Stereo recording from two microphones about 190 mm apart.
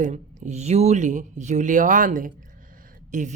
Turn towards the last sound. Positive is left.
turn(degrees=-40)  # may be behind; listen again after turning